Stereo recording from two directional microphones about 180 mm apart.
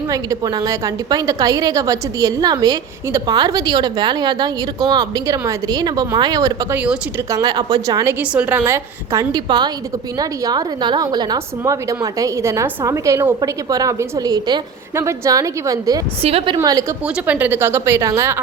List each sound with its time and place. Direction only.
0.1 s a woman's voice: 20° right (ahead or behind)
6.7 s speech: 5° right (ahead or behind)
7.3 s a woman's voice: 20° right (ahead or behind)
8.3 s a woman's voice: 10° right (ahead or behind)
16.2 s a woman's voice: 35° right (ahead or behind)
16.6 s a woman's voice: 20° right (ahead or behind)